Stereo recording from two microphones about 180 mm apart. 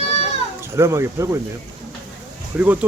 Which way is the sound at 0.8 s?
15° right (ahead or behind).